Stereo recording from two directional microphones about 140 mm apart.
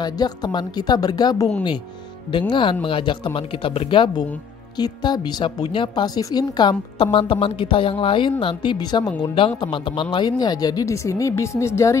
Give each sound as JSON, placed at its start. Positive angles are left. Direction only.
{"t": 0.0, "sound": "speech", "side_deg": 30}
{"t": 2.5, "sound": "a woman's voice", "side_deg": 35}